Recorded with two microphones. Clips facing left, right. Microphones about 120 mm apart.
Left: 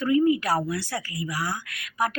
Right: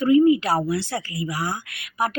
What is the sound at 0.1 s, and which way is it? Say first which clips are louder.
A woman's voice: right 5 dB; 20° right (ahead or behind).